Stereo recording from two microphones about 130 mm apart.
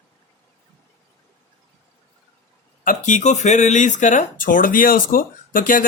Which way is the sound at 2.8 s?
80° left.